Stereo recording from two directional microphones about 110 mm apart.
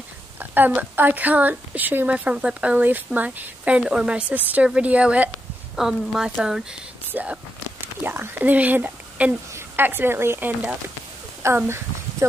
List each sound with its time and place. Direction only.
0.4 s a woman's voice: 15° right (ahead or behind)
7.1 s speech: 15° right (ahead or behind)